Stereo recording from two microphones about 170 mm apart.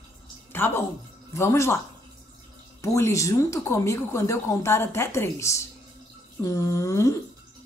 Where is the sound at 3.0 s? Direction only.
15° left (ahead or behind).